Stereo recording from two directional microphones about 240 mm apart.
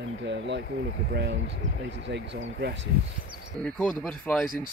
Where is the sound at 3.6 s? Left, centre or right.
Centre.